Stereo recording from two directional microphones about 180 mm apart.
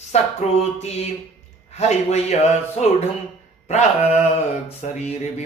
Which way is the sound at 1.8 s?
40° left (ahead or behind).